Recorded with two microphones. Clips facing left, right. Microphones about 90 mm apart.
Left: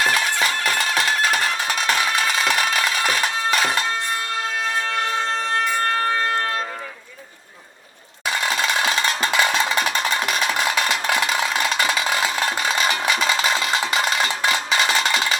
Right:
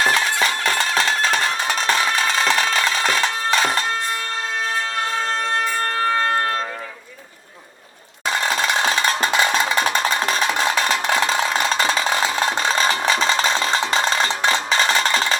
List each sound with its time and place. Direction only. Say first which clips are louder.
0.0 s music: right 2 dB; 35° right (ahead or behind)
8.3 s music: right 2 dB; 35° right (ahead or behind)
11.1 s a sound: right 2 dB; 35° right (ahead or behind)